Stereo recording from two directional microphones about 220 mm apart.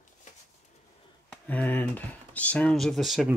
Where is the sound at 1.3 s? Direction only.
5° left (ahead or behind).